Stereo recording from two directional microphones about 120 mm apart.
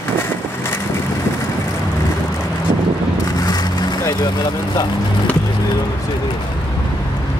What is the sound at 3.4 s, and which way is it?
Vehicle, 30° left (ahead or behind).